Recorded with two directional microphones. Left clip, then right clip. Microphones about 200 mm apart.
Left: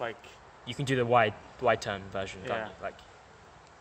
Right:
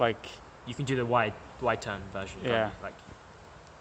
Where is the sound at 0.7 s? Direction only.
35° left (ahead or behind).